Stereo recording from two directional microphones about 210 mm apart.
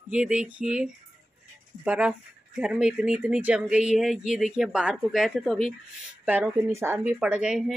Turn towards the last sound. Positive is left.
turn(degrees=-5)  # may be behind; listen again after turning